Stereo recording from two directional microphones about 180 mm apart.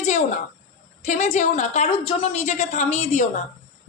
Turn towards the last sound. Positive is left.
turn(degrees=40)  # may be behind; listen again after turning